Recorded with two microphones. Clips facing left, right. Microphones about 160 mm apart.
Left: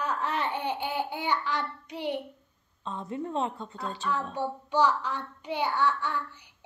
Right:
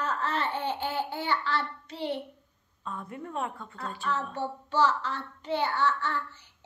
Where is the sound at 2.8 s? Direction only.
25° left (ahead or behind).